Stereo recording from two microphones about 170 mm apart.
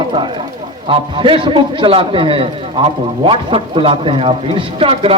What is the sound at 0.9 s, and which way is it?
A man's voice, 30° right (ahead or behind).